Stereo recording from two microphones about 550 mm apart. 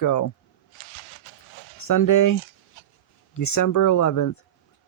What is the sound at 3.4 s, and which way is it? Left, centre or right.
Speech, left.